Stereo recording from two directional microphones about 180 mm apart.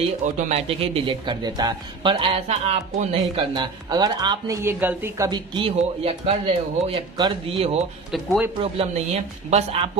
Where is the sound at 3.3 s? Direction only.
25° right (ahead or behind).